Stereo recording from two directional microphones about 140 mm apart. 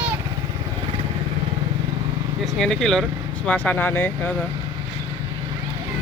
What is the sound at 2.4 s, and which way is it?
Speech, 5° left (ahead or behind).